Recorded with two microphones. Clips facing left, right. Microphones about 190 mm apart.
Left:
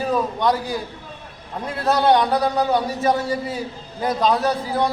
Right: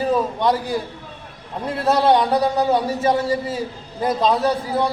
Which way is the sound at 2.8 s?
30° right (ahead or behind).